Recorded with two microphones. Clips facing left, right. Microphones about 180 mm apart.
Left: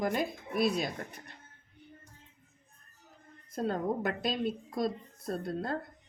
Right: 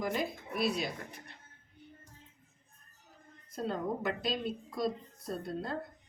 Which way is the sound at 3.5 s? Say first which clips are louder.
Left 3 dB; 50° left (ahead or behind).